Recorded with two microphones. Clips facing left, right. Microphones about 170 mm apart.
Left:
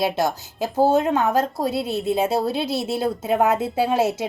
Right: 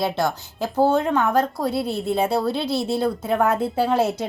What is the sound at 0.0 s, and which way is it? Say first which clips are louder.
A woman's voice: left 1 dB; 20° left (ahead or behind).